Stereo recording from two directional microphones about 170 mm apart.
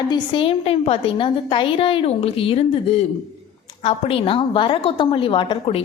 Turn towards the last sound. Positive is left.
turn(degrees=30)  # may be behind; listen again after turning